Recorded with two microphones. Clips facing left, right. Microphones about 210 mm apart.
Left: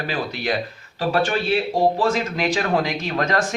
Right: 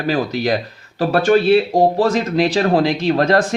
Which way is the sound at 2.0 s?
35° right (ahead or behind).